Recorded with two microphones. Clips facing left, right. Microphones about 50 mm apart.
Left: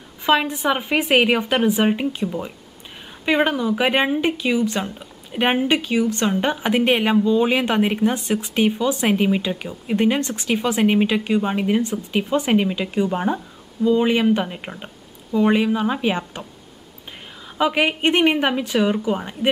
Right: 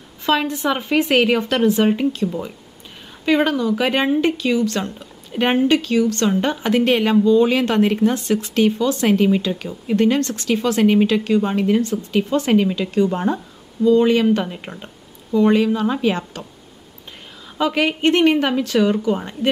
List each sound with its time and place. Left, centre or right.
0.2 s a woman's voice: centre
17.6 s a woman's voice: centre